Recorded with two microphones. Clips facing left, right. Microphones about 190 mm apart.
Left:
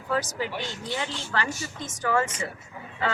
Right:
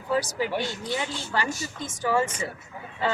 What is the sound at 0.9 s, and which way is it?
A woman's voice, 15° right (ahead or behind).